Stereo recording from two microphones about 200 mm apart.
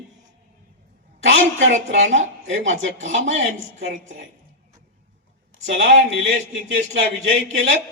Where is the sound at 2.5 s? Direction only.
70° right (ahead or behind).